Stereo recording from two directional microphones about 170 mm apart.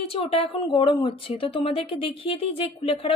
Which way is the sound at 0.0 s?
35° left (ahead or behind).